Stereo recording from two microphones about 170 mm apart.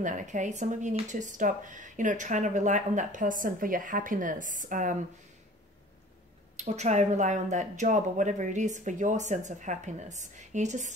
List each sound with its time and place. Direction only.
0.0 s speech: 45° right (ahead or behind)
6.5 s speech: 40° right (ahead or behind)